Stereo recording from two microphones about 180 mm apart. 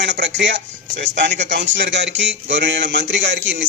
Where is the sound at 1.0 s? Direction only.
80° right.